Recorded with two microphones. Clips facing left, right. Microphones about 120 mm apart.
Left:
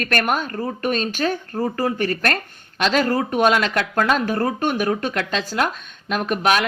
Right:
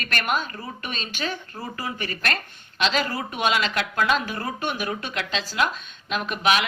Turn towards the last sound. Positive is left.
turn(degrees=45)  # may be behind; listen again after turning